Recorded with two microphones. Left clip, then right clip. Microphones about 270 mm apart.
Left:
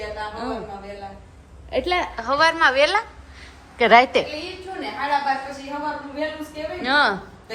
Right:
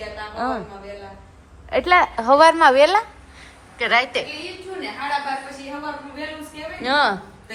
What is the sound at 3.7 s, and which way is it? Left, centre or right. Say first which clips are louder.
Speech: left 5 dB; left.